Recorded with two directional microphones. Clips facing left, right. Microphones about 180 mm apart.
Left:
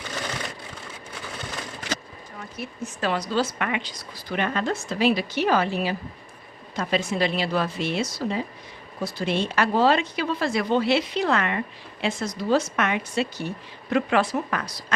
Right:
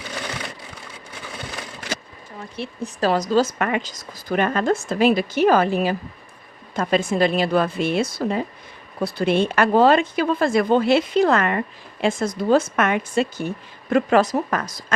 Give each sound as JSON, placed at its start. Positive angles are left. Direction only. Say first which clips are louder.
{"t": 2.6, "sound": "a woman's voice", "louder": "right 6 dB", "side_deg": -35}